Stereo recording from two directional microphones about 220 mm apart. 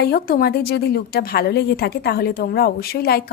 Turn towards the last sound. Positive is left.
turn(degrees=45)  # may be behind; listen again after turning